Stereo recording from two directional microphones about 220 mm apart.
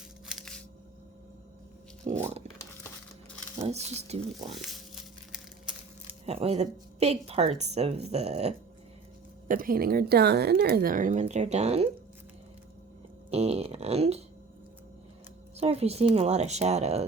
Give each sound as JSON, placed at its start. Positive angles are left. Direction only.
{"t": 0.3, "sound": "a sound", "side_deg": 0}
{"t": 2.0, "sound": "a sound", "side_deg": -25}
{"t": 3.6, "sound": "a woman's voice", "side_deg": -30}
{"t": 4.5, "sound": "crumpling", "side_deg": 0}
{"t": 6.2, "sound": "a woman's voice", "side_deg": -30}
{"t": 9.5, "sound": "a woman's voice", "side_deg": -40}
{"t": 13.3, "sound": "a woman's voice", "side_deg": -30}
{"t": 15.5, "sound": "a woman's voice", "side_deg": -30}